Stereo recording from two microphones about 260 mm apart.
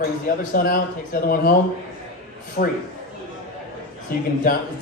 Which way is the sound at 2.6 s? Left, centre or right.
Left.